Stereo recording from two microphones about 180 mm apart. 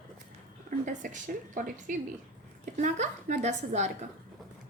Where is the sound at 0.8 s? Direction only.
45° right (ahead or behind).